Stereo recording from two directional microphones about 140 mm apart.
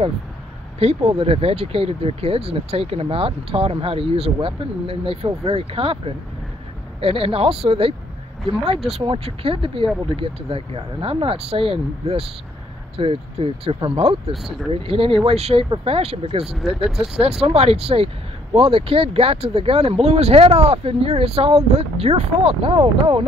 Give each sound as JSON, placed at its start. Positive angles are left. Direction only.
{"t": 0.7, "sound": "speech", "side_deg": -45}
{"t": 8.9, "sound": "speech", "side_deg": -40}
{"t": 14.3, "sound": "speech", "side_deg": 0}
{"t": 14.7, "sound": "speech", "side_deg": -40}
{"t": 16.4, "sound": "speech", "side_deg": 0}
{"t": 17.2, "sound": "speech", "side_deg": -45}